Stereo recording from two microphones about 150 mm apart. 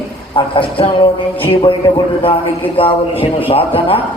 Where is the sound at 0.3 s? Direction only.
35° left (ahead or behind).